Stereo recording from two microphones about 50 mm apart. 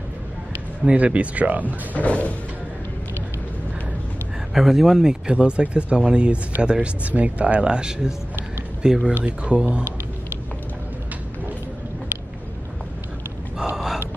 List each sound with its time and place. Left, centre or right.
0.8 s speech: right
2.0 s music: left
4.6 s speech: centre
5.2 s speech: centre
9.2 s speech: right